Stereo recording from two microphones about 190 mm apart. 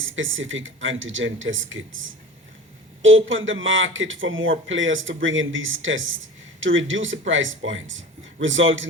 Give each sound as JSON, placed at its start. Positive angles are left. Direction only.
{"t": 0.0, "sound": "speech", "side_deg": -90}